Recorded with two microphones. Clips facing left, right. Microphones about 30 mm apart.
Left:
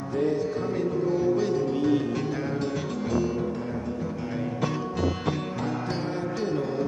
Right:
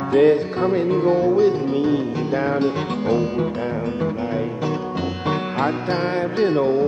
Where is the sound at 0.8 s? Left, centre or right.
Right.